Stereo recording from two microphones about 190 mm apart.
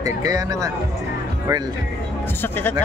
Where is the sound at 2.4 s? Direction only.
10° left (ahead or behind).